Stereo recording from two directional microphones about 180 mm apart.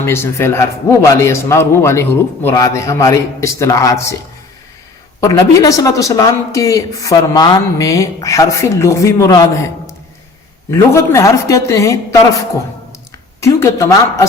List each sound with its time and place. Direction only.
0.0 s a woman's voice: 15° left (ahead or behind)
5.2 s a woman's voice: 20° left (ahead or behind)
13.4 s a woman's voice: 15° left (ahead or behind)